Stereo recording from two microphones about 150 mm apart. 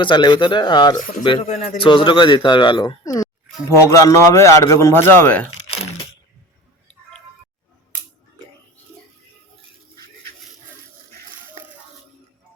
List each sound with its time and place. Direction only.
0.0 s speech: 30° left (ahead or behind)
1.4 s speech: 55° left (ahead or behind)
1.8 s speech: 35° left (ahead or behind); by 5.5 s 10° left (ahead or behind)
5.6 s crunch: 40° left (ahead or behind)